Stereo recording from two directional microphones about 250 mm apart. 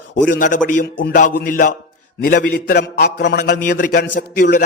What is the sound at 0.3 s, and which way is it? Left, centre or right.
A man's voice, left.